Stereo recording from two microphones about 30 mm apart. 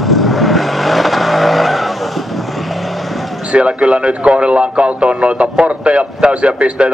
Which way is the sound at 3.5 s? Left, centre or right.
Right.